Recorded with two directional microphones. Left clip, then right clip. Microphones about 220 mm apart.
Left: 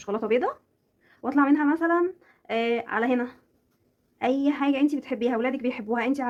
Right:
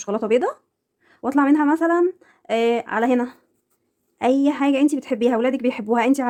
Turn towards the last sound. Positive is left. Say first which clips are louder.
# right 7 dB
turn(degrees=-55)  # may be behind; listen again after turning